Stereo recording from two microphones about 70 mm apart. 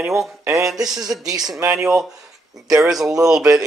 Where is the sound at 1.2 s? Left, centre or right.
Right.